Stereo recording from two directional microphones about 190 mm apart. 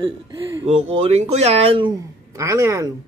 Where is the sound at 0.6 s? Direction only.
35° right (ahead or behind).